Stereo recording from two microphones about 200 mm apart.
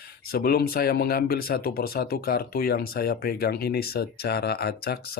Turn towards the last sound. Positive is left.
turn(degrees=50)  # may be behind; listen again after turning